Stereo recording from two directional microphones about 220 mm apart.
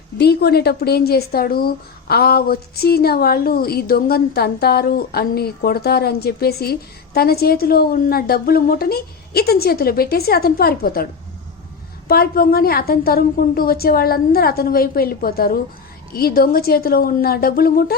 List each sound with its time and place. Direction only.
0.2 s speech: 50° left (ahead or behind)